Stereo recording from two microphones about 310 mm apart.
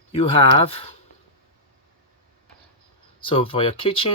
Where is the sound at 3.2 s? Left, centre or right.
Centre.